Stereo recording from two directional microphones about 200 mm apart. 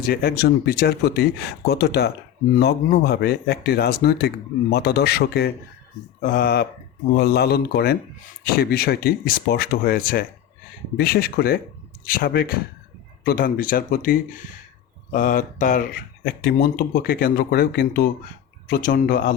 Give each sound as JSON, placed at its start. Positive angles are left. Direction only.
{"t": 0.0, "sound": "speech", "side_deg": 50}